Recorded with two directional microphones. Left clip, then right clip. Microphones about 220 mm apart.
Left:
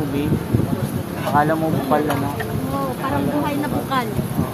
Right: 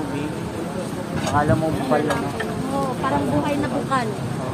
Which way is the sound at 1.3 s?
30° left (ahead or behind).